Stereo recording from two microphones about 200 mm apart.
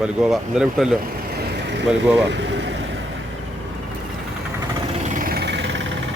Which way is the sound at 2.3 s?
65° right (ahead or behind).